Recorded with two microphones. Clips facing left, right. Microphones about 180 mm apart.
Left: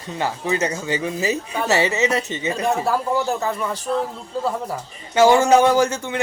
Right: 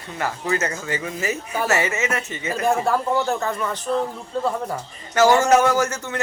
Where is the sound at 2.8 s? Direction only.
5° left (ahead or behind).